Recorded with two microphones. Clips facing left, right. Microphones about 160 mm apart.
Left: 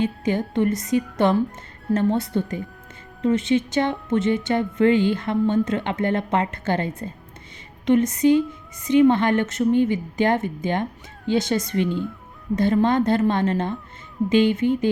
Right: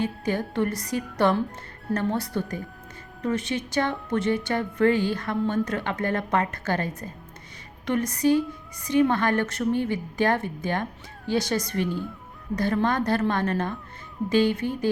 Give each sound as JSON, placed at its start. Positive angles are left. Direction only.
{"t": 0.0, "sound": "speech", "side_deg": 20}